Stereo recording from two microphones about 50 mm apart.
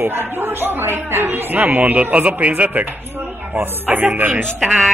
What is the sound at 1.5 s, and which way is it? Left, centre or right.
A man's voice, right.